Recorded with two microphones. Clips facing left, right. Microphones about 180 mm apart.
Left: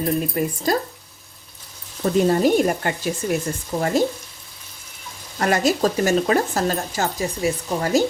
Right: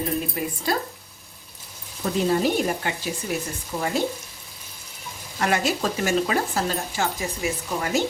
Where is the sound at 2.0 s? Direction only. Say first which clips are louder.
Left 5 dB; 45° left (ahead or behind).